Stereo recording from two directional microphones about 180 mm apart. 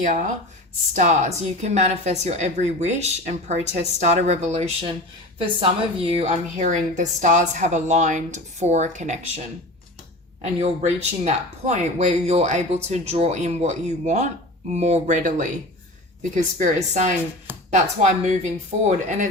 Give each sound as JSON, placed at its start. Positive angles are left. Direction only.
{"t": 0.9, "sound": "a woman's voice", "side_deg": -40}
{"t": 10.4, "sound": "a woman's voice", "side_deg": -40}